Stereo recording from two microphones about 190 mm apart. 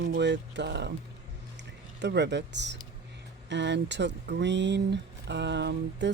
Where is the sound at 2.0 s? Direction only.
65° right (ahead or behind).